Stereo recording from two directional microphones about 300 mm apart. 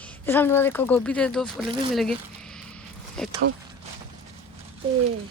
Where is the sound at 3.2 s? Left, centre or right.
Centre.